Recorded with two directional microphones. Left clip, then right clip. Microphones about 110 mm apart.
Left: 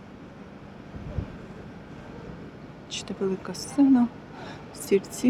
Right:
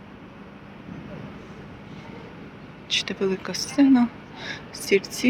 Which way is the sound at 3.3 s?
15° left (ahead or behind).